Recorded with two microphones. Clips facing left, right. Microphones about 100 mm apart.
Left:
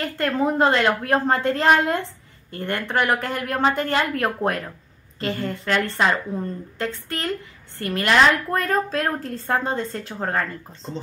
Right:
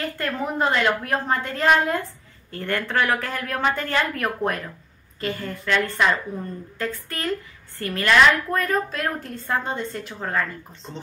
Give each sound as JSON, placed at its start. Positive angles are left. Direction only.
{"t": 0.0, "sound": "a woman's voice", "side_deg": 30}